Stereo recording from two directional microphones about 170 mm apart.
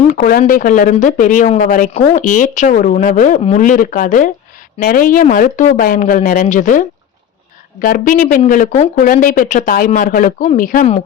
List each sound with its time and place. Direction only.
0.1 s speech: 55° left (ahead or behind)